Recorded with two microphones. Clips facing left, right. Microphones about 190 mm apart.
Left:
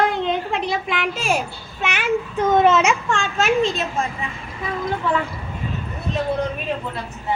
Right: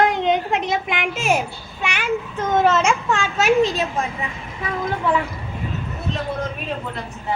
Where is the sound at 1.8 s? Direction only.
5° left (ahead or behind).